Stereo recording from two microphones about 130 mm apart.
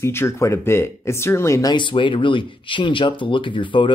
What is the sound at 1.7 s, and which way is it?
Speech, 40° left (ahead or behind).